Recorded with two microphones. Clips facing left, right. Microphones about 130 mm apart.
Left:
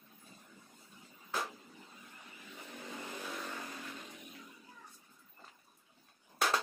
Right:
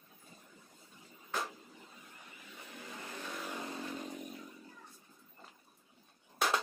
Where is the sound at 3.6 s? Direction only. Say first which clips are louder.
Right 6 dB; 35° right (ahead or behind).